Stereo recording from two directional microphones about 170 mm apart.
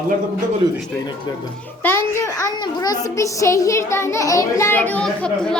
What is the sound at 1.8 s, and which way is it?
A child's voice, 15° left (ahead or behind).